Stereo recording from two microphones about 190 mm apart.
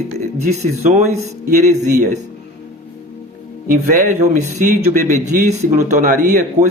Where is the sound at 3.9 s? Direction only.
40° right (ahead or behind).